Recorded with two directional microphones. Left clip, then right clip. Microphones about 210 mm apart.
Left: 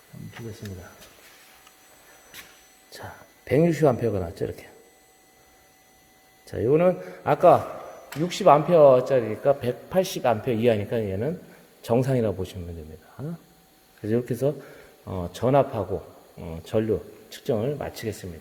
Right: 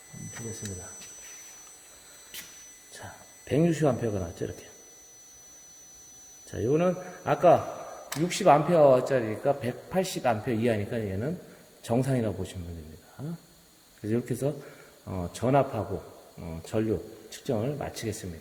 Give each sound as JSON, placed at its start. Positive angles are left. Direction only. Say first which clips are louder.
{"t": 2.9, "sound": "speech", "louder": "left 5 dB", "side_deg": 30}
{"t": 6.5, "sound": "a man's voice", "louder": "left 6 dB", "side_deg": 25}
{"t": 14.0, "sound": "speech", "louder": "left 5 dB", "side_deg": 30}